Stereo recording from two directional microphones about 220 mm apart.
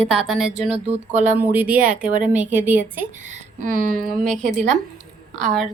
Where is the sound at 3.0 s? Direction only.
35° right (ahead or behind).